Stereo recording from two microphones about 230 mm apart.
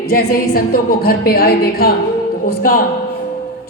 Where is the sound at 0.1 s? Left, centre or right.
Left.